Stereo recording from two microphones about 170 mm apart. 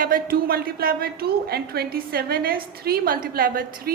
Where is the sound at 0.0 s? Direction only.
55° right (ahead or behind).